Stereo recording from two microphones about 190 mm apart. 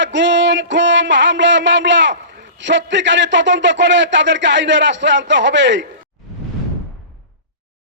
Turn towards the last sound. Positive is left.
turn(degrees=-70)  # may be behind; listen again after turning